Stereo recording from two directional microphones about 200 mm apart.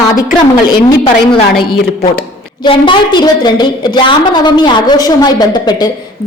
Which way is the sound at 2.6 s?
25° left (ahead or behind).